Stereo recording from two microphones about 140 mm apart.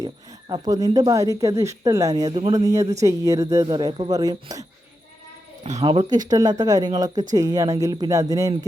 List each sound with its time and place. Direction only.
0.0 s speech: 25° right (ahead or behind)
5.8 s speech: 35° right (ahead or behind)